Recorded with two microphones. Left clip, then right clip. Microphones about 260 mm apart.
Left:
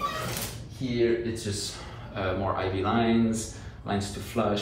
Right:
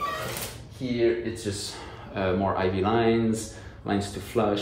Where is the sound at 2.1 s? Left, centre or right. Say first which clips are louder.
Right 3 dB; right.